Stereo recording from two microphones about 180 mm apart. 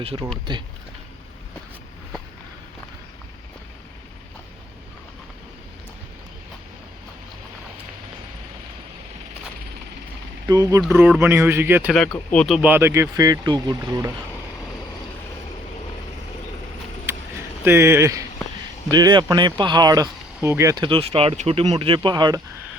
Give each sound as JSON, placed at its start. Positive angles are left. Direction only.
{"t": 0.0, "sound": "speech", "side_deg": -30}
{"t": 10.4, "sound": "speech", "side_deg": -20}
{"t": 10.8, "sound": "speech", "side_deg": -5}
{"t": 12.3, "sound": "speech", "side_deg": 5}
{"t": 12.6, "sound": "speech", "side_deg": -15}
{"t": 17.1, "sound": "a sound", "side_deg": -15}
{"t": 18.9, "sound": "speech", "side_deg": -20}